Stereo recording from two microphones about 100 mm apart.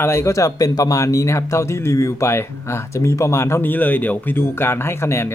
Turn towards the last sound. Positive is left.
turn(degrees=25)  # may be behind; listen again after turning